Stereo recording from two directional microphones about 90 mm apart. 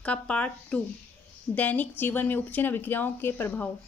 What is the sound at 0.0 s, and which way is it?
A woman's voice, 15° left (ahead or behind).